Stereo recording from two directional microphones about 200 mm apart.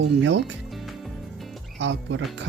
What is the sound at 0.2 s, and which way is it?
Speech, 65° right (ahead or behind).